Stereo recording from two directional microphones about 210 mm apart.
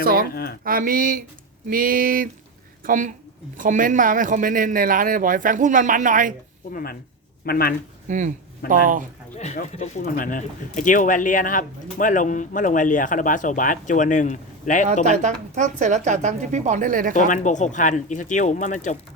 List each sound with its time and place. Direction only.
0.0 s a man's voice: 45° right (ahead or behind)
7.4 s speech: 45° left (ahead or behind)
8.0 s a man's voice: 35° right (ahead or behind)
9.4 s speech: 30° left (ahead or behind)
15.0 s a man's voice: 35° right (ahead or behind)
17.2 s speech: 35° left (ahead or behind)